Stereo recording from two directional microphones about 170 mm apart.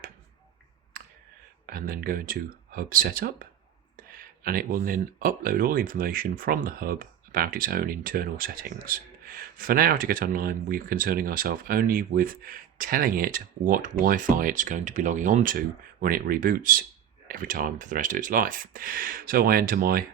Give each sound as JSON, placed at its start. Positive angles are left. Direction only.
{"t": 0.9, "sound": "clicking", "side_deg": -55}
{"t": 1.6, "sound": "speech", "side_deg": -55}